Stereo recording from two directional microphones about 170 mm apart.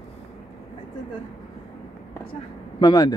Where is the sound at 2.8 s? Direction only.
25° left (ahead or behind).